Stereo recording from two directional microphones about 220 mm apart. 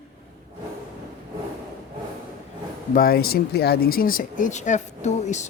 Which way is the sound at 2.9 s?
45° left (ahead or behind).